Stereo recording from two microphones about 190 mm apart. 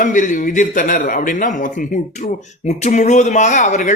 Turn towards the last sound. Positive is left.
turn(degrees=40)  # may be behind; listen again after turning